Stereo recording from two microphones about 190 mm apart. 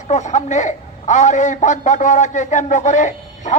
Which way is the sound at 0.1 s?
35° left (ahead or behind).